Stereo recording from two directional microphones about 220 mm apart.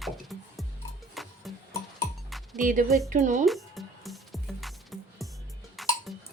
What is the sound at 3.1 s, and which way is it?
Speech, 35° right (ahead or behind).